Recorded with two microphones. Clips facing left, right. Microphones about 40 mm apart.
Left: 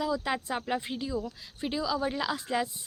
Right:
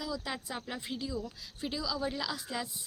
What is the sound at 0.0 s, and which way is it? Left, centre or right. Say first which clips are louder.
Speech: left 8 dB; left.